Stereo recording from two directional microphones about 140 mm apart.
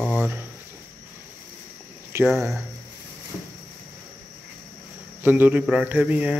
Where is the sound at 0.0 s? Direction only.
5° left (ahead or behind).